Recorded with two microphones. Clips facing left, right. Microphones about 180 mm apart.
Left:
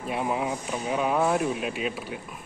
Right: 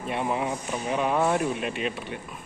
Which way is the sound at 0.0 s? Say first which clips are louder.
Even; centre (ahead or behind).